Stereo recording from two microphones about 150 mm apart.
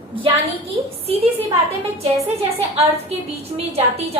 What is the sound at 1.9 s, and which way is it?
A woman's voice, 45° right (ahead or behind).